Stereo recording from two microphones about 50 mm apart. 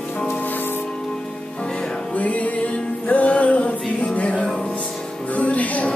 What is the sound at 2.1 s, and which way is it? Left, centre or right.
Music, left.